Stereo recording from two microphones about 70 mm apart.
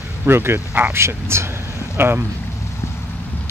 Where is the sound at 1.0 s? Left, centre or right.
Right.